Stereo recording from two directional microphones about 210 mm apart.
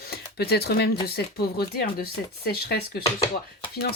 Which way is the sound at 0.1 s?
50° left (ahead or behind).